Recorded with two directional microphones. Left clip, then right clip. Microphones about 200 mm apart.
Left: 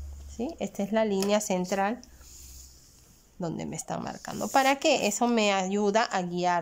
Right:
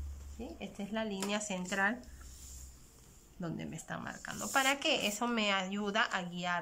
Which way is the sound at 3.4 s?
20° left (ahead or behind).